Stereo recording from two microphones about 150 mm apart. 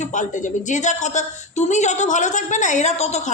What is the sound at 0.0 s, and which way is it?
A woman's voice, 55° left (ahead or behind).